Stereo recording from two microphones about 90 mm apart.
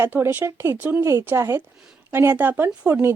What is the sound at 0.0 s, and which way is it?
Speech, 25° right (ahead or behind).